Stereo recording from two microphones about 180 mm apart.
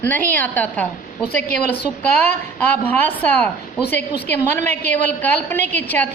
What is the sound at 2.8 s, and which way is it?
A man's voice, 10° left (ahead or behind).